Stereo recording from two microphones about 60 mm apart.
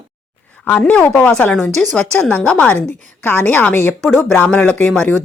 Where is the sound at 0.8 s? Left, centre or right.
Centre.